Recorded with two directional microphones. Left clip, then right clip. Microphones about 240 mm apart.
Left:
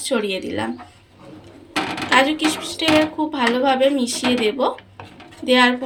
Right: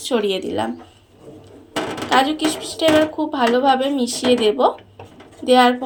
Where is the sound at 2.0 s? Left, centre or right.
Centre.